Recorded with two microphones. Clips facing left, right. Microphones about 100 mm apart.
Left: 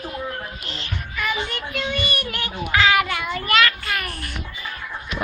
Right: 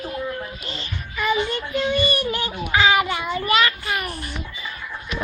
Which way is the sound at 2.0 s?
30° right (ahead or behind).